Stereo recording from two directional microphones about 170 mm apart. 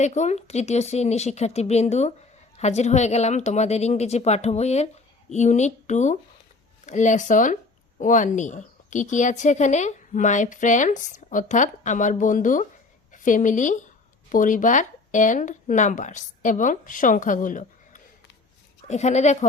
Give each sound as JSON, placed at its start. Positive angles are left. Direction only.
{"t": 0.0, "sound": "a woman's voice", "side_deg": 40}